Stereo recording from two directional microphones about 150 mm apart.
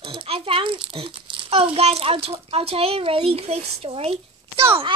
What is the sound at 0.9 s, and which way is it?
Speech, 35° right (ahead or behind).